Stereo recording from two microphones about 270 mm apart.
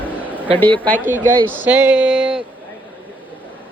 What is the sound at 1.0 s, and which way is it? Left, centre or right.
Speech, centre.